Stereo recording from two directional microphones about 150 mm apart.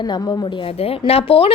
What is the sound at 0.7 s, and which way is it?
Speech, 40° left (ahead or behind).